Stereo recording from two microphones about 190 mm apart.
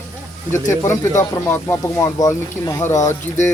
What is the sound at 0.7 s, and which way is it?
Speech, 15° left (ahead or behind).